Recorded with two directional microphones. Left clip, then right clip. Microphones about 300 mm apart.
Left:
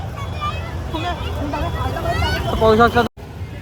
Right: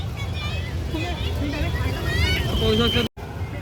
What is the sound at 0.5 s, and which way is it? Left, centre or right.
Vehicle, centre.